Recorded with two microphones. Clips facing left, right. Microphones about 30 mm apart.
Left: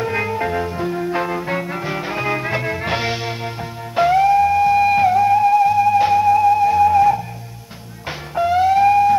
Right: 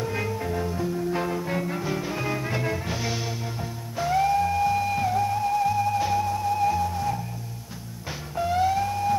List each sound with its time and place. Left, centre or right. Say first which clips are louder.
0.0 s music: left 8 dB; left
2.8 s music: left 9 dB; left
3.1 s music: left 7 dB; left
4.1 s music: left 7 dB; left
6.8 s music: left 15 dB; left
8.4 s music: left 9 dB; left